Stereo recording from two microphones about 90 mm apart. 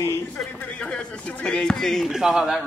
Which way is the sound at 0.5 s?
15° left (ahead or behind).